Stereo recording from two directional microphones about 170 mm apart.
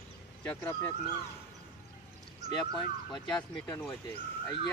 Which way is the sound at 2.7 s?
5° left (ahead or behind).